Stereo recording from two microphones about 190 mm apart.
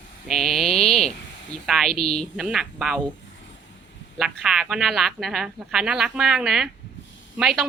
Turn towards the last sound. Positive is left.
turn(degrees=0)  # may be behind; listen again after turning